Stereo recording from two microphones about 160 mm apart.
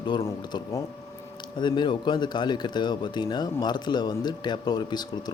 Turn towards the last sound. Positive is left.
turn(degrees=25)  # may be behind; listen again after turning